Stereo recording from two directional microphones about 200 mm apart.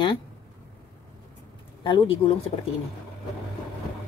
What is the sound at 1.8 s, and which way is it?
Speech, 25° left (ahead or behind).